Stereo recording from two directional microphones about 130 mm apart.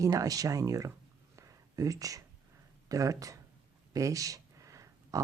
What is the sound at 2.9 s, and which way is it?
Speech, 25° right (ahead or behind).